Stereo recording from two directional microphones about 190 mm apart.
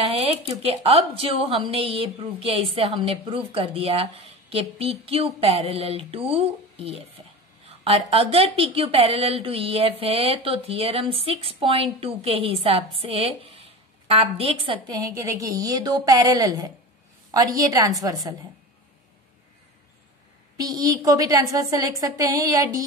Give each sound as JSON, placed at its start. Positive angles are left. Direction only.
{"t": 0.2, "sound": "a woman's voice", "side_deg": -30}
{"t": 20.5, "sound": "a woman's voice", "side_deg": -20}